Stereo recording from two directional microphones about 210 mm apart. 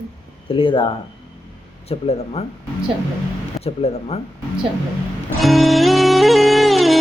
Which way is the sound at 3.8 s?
30° left (ahead or behind).